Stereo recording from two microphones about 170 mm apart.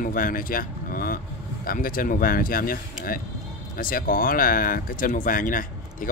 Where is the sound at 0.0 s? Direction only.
55° left (ahead or behind).